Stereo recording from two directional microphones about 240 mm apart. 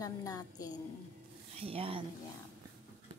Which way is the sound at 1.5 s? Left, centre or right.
Right.